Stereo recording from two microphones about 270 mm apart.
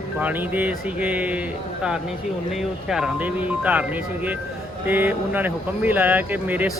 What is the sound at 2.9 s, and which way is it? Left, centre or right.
Speech, centre.